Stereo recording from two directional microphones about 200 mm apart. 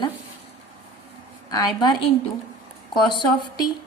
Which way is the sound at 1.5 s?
20° left (ahead or behind).